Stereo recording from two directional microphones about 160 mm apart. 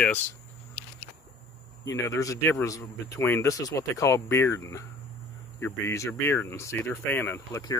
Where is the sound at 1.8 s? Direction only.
20° left (ahead or behind).